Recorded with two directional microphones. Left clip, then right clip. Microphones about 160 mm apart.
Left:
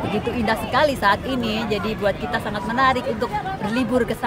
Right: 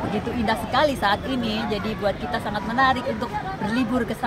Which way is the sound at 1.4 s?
60° left (ahead or behind).